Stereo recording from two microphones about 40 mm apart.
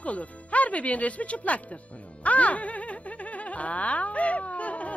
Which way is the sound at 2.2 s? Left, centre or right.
Left.